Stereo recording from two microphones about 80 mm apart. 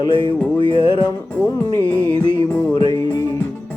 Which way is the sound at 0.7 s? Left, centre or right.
Left.